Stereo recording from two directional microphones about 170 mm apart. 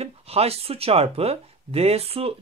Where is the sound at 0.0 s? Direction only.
35° right (ahead or behind).